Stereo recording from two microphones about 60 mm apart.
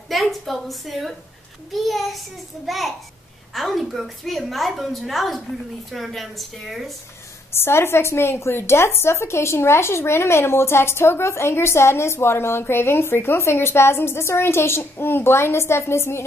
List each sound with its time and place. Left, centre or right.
0.1 s a sound: centre
1.7 s a woman's voice: centre
7.5 s speech: left